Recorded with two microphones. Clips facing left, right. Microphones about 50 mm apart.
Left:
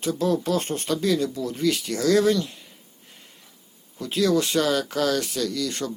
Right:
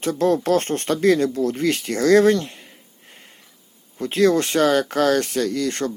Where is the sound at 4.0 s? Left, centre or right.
Right.